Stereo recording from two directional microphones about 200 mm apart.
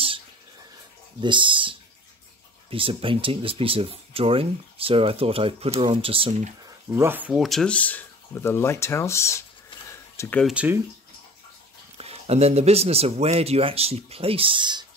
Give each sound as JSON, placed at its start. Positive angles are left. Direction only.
{"t": 1.2, "sound": "speech", "side_deg": -25}
{"t": 6.9, "sound": "speech", "side_deg": -10}
{"t": 10.4, "sound": "speech", "side_deg": -5}
{"t": 12.0, "sound": "speech", "side_deg": -30}